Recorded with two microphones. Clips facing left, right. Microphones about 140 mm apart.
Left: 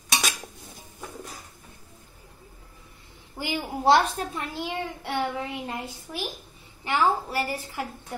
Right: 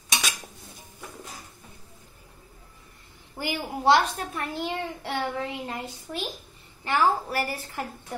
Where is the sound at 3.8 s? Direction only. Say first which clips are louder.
Left 1 dB; 30° left (ahead or behind).